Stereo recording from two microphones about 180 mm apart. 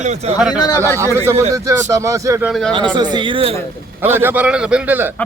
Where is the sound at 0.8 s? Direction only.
15° right (ahead or behind).